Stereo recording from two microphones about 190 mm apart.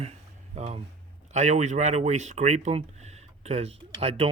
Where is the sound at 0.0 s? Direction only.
35° right (ahead or behind).